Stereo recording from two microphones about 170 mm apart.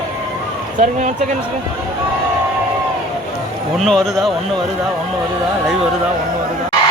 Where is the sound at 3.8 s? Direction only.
Centre (ahead or behind).